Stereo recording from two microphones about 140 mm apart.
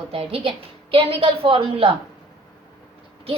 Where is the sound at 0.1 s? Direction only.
40° right (ahead or behind).